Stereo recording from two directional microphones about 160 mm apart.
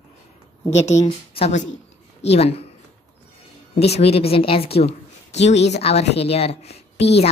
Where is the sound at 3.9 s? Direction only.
40° left (ahead or behind).